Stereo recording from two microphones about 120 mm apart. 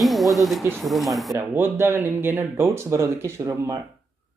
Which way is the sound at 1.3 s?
20° right (ahead or behind).